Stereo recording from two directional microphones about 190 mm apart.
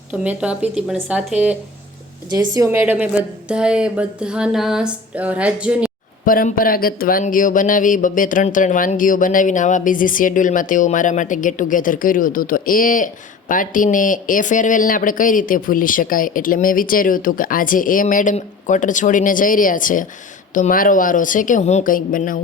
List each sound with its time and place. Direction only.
0.1 s a woman's voice: 5° right (ahead or behind)
2.3 s a woman's voice: 20° right (ahead or behind)
6.2 s speech: 45° left (ahead or behind)